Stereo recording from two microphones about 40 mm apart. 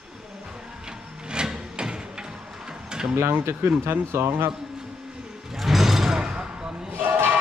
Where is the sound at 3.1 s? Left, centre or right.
Right.